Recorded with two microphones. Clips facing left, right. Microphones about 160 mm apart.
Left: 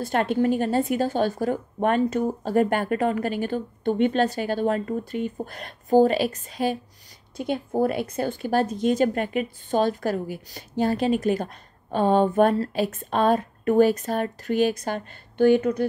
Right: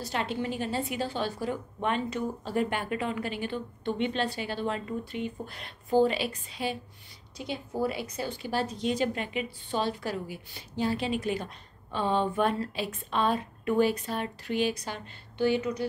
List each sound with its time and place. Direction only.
0.0 s speech: 50° left (ahead or behind)